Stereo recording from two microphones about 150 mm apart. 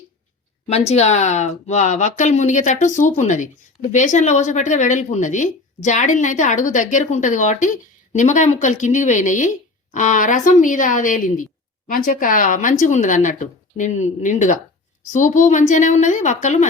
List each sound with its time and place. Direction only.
0.7 s speech: 45° left (ahead or behind)